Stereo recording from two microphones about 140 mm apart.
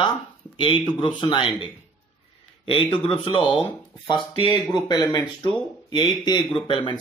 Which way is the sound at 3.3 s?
35° left (ahead or behind).